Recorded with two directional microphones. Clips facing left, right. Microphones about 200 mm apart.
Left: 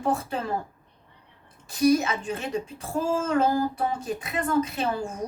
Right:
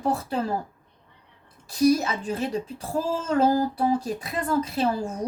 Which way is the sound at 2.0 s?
35° right (ahead or behind).